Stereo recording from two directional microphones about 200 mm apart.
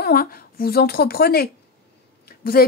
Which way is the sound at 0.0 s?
50° left (ahead or behind).